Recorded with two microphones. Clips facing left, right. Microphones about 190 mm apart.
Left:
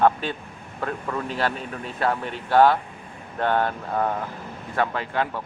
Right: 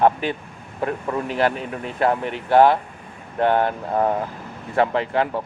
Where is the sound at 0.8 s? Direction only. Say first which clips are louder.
Right 4 dB; 25° right (ahead or behind).